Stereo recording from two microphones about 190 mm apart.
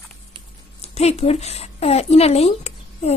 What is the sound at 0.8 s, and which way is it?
A woman's voice, 35° left (ahead or behind).